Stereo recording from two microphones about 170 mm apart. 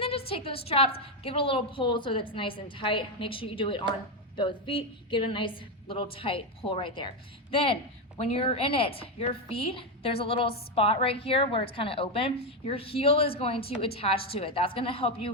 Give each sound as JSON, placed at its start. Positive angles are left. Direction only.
{"t": 0.3, "sound": "a woman's voice", "side_deg": 35}